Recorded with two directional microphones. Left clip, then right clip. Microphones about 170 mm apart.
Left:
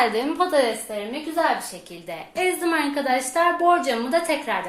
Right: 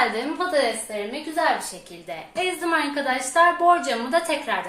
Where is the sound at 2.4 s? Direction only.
35° left (ahead or behind).